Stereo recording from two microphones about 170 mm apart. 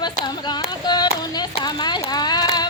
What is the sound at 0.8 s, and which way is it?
Clapping, 25° left (ahead or behind).